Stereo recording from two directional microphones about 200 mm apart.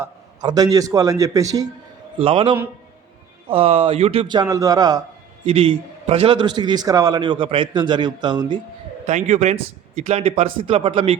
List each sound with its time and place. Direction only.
0.0 s a man's voice: 20° right (ahead or behind)
5.5 s a man's voice: 30° right (ahead or behind)
9.0 s a man's voice: 35° right (ahead or behind)